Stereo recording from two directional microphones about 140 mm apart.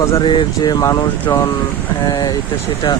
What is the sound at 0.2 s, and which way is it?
Speech, 35° left (ahead or behind).